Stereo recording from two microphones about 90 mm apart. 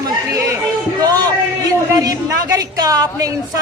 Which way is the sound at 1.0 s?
50° right (ahead or behind).